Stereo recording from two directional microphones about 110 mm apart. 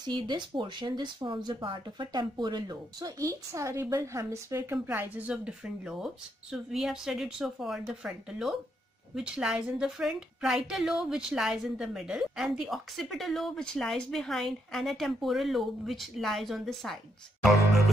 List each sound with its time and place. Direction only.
0.0 s speech: 45° right (ahead or behind); by 4.7 s 25° right (ahead or behind)
4.8 s a woman's voice: 15° right (ahead or behind)